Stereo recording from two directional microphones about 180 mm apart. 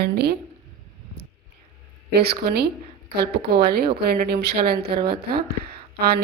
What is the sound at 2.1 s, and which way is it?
A woman's voice, 60° right (ahead or behind).